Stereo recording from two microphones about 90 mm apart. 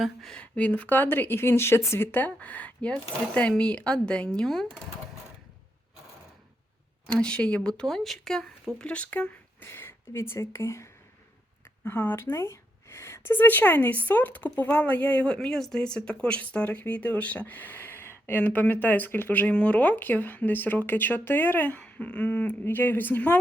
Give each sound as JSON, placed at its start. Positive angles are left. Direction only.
{"t": 0.0, "sound": "speech", "side_deg": 5}
{"t": 7.1, "sound": "speech", "side_deg": 10}
{"t": 8.8, "sound": "speech", "side_deg": 15}
{"t": 11.9, "sound": "a woman's voice", "side_deg": 20}